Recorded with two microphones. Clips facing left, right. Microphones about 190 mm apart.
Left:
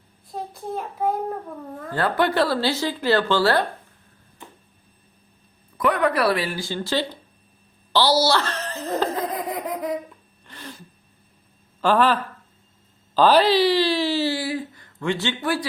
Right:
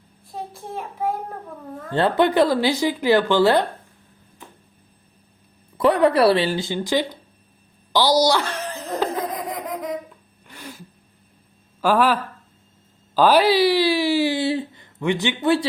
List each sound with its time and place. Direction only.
0.3 s a child's voice: centre (ahead or behind)
1.9 s speech: 25° right (ahead or behind)
5.7 s speech: 30° right (ahead or behind); by 7.2 s 15° right (ahead or behind)
7.9 s chuckle: 15° right (ahead or behind)
9.3 s laughter: centre (ahead or behind)
10.4 s a sound: 10° right (ahead or behind)
11.8 s speech: 10° right (ahead or behind)